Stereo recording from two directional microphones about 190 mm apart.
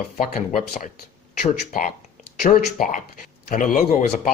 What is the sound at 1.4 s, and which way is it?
Speech, 45° left (ahead or behind).